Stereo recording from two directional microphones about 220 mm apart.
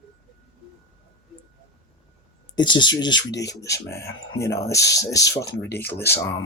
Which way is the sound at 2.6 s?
20° left (ahead or behind).